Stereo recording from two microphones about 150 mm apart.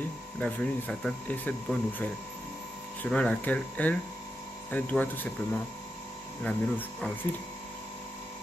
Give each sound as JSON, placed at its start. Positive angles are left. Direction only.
{"t": 0.4, "sound": "speech", "side_deg": 5}